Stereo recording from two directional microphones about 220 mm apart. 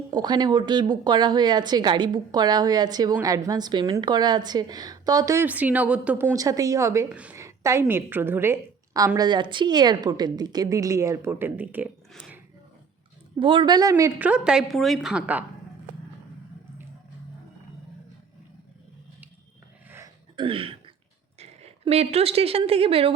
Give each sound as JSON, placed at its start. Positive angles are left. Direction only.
{"t": 0.1, "sound": "a woman's voice", "side_deg": -20}
{"t": 13.4, "sound": "a woman's voice", "side_deg": -20}
{"t": 19.9, "sound": "a sound", "side_deg": -15}
{"t": 21.3, "sound": "a woman's voice", "side_deg": -30}